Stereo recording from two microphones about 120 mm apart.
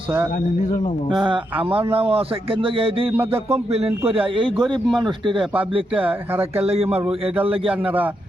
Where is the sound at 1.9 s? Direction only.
55° right (ahead or behind).